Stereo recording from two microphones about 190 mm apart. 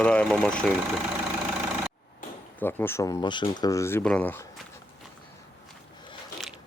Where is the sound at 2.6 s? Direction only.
10° left (ahead or behind).